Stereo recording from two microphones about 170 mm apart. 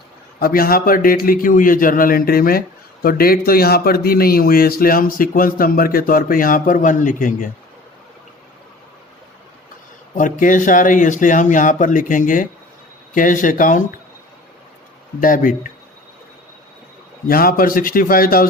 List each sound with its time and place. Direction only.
0.3 s a man's voice: 60° left (ahead or behind)
10.2 s speech: 50° left (ahead or behind)
15.2 s speech: 55° left (ahead or behind)
17.2 s a man's voice: 60° left (ahead or behind)